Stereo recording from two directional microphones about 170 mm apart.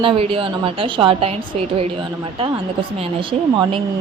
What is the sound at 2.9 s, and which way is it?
Speech, 30° right (ahead or behind).